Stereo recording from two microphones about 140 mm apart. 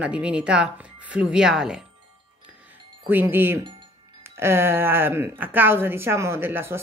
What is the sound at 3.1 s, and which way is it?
A woman's voice, 15° right (ahead or behind).